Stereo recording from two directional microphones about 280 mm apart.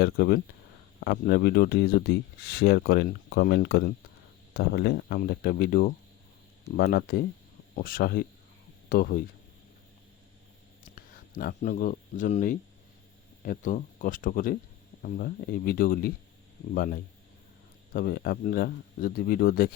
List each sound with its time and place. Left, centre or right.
0.0 s speech: left
10.9 s speech: left